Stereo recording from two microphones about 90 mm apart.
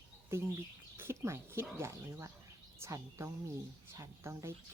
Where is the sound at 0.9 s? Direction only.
25° right (ahead or behind).